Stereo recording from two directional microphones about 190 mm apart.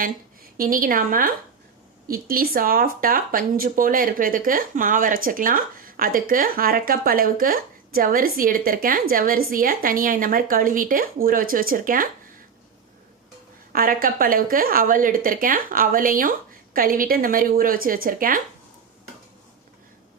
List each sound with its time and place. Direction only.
0.5 s speech: 45° right (ahead or behind)
13.7 s speech: 50° right (ahead or behind)